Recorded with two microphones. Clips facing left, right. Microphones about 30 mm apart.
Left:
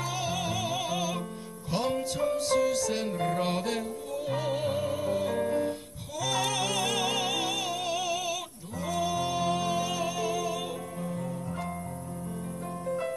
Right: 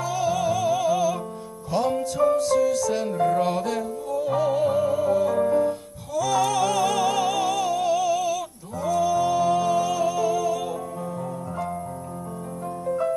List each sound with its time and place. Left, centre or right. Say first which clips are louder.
0.0 s music: right 8 dB; left